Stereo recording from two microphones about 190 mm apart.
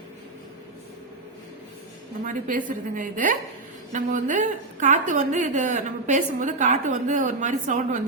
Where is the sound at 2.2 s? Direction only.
45° right (ahead or behind).